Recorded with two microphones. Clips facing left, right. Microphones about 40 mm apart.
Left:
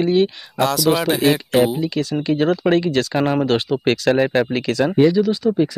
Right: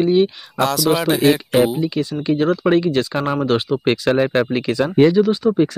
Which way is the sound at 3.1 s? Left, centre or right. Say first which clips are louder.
Left 1 dB; centre.